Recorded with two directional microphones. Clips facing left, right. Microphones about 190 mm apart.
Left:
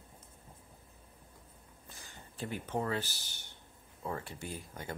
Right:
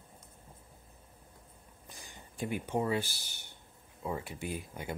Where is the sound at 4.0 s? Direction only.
10° right (ahead or behind).